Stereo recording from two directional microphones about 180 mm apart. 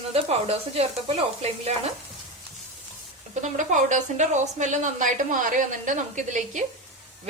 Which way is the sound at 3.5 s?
45° right (ahead or behind).